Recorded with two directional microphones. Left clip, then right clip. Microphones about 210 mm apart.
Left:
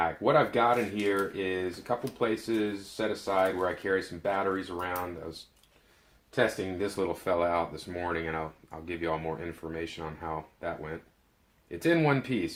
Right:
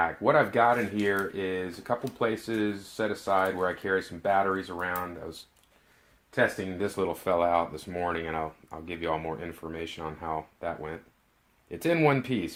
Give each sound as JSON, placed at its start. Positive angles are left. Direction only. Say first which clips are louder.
{"t": 0.0, "sound": "speech", "louder": "right 1 dB", "side_deg": -35}